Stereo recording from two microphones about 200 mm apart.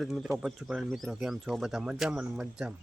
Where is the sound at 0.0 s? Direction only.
Centre (ahead or behind).